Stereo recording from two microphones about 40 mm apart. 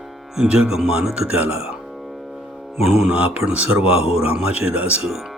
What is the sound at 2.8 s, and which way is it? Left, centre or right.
Mantra, centre.